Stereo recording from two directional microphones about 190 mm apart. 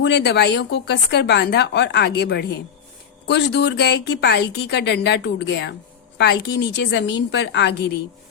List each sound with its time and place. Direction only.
0.0 s a woman's voice: 60° left (ahead or behind)